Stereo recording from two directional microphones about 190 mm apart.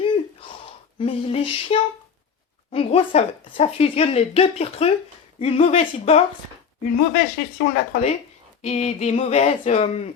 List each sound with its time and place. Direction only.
0.0 s a sound: 25° left (ahead or behind)
2.7 s speech: 30° left (ahead or behind)
7.1 s speech: 50° left (ahead or behind)
8.6 s speech: 35° left (ahead or behind)